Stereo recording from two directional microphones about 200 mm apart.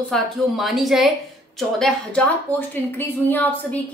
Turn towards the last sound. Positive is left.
turn(degrees=10)  # may be behind; listen again after turning